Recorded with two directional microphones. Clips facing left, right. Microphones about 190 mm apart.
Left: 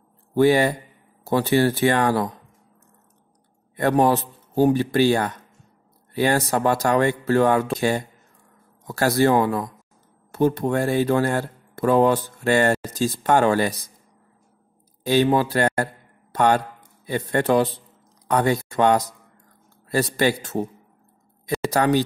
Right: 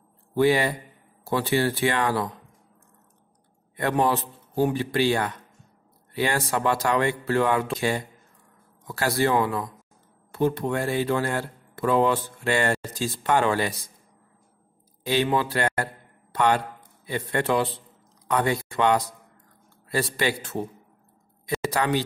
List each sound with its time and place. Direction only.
0.3 s speech: 45° left (ahead or behind)
3.7 s speech: 45° left (ahead or behind)
15.0 s a man's voice: 40° left (ahead or behind)
21.6 s speech: 45° left (ahead or behind)